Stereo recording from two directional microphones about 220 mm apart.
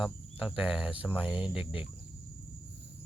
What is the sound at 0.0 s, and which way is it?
Speech, 5° right (ahead or behind).